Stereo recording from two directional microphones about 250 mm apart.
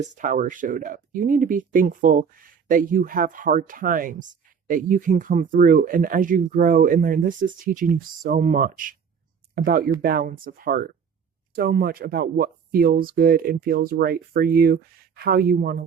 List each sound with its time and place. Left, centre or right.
0.0 s speech: right